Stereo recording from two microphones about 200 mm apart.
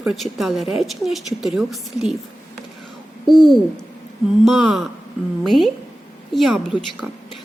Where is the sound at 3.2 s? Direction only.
Centre (ahead or behind).